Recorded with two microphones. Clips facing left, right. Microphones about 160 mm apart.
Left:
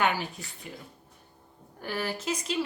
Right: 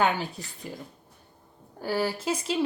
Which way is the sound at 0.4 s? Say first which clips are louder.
Right 3 dB; 35° right (ahead or behind).